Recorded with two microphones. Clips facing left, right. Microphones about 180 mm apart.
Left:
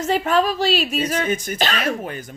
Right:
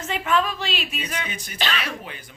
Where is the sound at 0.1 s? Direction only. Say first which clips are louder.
Left 4 dB; 40° left (ahead or behind).